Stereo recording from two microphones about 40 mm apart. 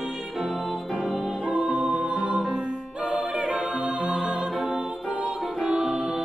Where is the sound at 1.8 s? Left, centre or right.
Right.